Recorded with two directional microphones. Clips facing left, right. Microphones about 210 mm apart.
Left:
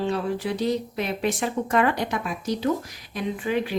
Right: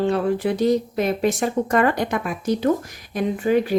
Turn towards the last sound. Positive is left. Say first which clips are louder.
# right 6 dB
turn(degrees=-45)  # may be behind; listen again after turning